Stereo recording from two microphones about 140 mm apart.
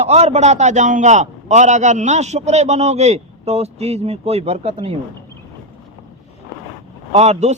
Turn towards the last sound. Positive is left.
turn(degrees=-55)  # may be behind; listen again after turning